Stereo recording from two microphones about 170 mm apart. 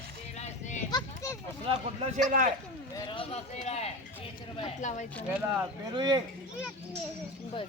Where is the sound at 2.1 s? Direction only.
50° right (ahead or behind).